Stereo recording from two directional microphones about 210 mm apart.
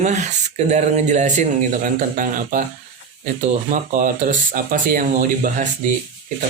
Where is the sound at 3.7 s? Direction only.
40° right (ahead or behind).